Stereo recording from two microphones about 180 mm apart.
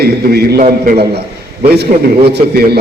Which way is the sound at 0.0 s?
60° right (ahead or behind).